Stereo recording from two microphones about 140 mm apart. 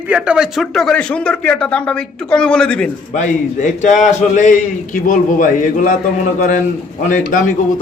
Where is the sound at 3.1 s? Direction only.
60° left (ahead or behind).